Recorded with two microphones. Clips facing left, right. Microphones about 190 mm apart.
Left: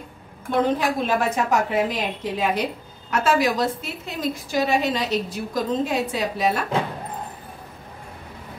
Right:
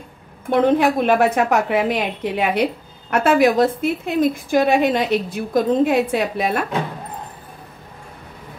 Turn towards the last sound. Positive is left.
turn(degrees=-60)  # may be behind; listen again after turning